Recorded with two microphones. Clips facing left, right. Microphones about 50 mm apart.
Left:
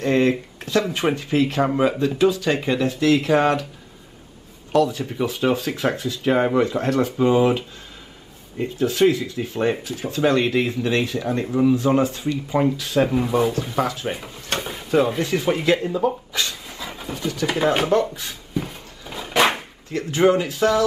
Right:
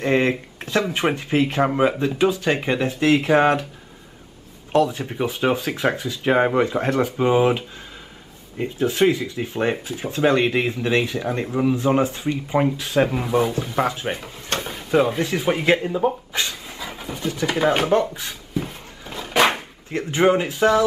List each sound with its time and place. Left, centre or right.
0.0 s speech: right
4.7 s speech: right
13.1 s speech: centre
13.7 s speech: right
14.1 s drawer open or close: centre
14.9 s speech: centre
16.6 s dog: centre
17.5 s speech: centre
18.2 s a sound: centre
19.9 s speech: right